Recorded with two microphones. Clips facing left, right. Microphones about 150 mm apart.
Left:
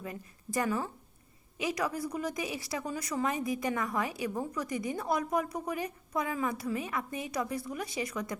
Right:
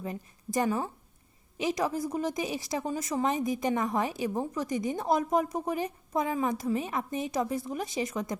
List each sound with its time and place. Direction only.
0.0 s a woman's voice: 20° right (ahead or behind)